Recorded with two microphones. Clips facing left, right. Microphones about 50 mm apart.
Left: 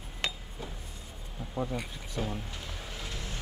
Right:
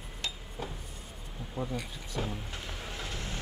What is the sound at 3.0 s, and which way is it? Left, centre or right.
Vehicle, right.